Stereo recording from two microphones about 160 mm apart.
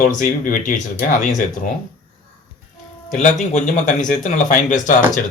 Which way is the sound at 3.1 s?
45° left (ahead or behind).